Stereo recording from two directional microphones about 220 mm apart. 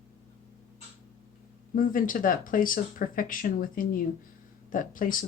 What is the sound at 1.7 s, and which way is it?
Speech, 40° left (ahead or behind).